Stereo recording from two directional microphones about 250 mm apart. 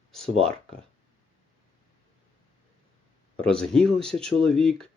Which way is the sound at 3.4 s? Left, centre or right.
Centre.